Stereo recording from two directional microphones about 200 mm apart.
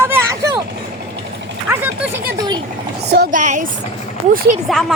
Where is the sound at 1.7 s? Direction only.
10° right (ahead or behind).